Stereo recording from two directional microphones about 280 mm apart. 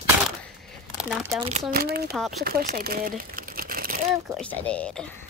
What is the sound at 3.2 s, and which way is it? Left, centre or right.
Crumpling, right.